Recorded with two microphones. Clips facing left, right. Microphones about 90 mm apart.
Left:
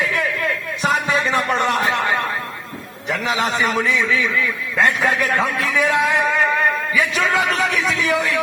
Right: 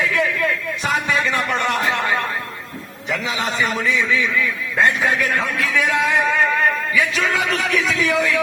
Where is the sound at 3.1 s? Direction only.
55° left (ahead or behind).